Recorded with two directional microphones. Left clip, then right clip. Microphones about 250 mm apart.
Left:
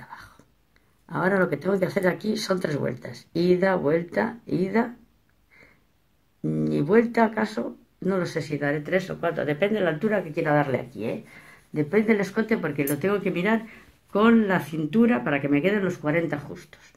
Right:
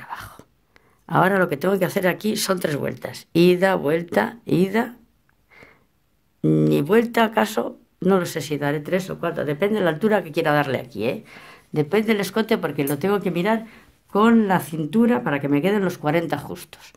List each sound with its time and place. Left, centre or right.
0.0 s whispering: right
1.0 s speech: right
6.5 s speech: right